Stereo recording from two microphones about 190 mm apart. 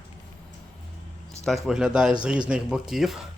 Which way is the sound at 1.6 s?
5° right (ahead or behind).